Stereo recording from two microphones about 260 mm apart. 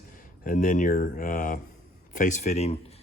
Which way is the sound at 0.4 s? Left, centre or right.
Left.